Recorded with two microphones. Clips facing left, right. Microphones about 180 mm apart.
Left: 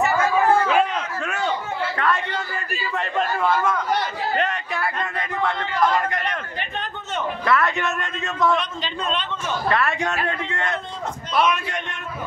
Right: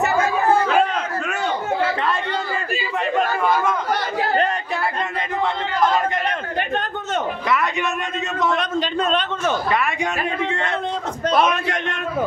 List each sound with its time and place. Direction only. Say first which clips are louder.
7.4 s a man's voice: left 4 dB; 15° right (ahead or behind)
9.7 s a man's voice: even; 15° right (ahead or behind)